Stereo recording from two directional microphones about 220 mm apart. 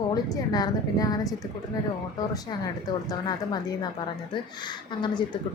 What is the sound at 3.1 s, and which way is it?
Speech, 20° left (ahead or behind).